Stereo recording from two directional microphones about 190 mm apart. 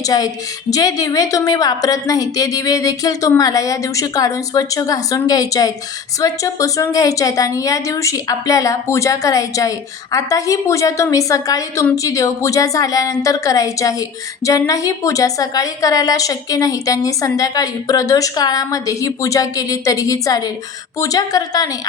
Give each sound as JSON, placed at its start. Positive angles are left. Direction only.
{"t": 0.0, "sound": "a woman's voice", "side_deg": 20}